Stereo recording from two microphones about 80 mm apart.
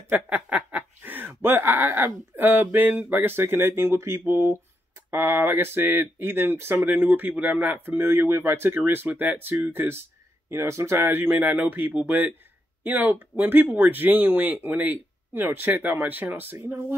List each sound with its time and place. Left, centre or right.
0.1 s speech: centre